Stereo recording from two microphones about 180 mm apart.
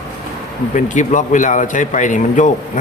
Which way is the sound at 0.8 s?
45° left (ahead or behind).